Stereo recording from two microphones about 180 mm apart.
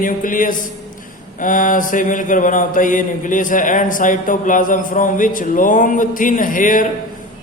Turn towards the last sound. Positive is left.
turn(degrees=45)  # may be behind; listen again after turning